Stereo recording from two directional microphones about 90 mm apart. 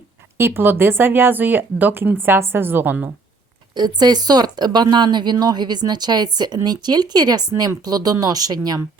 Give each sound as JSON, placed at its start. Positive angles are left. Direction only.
{"t": 0.3, "sound": "speech", "side_deg": -25}
{"t": 3.8, "sound": "speech", "side_deg": -50}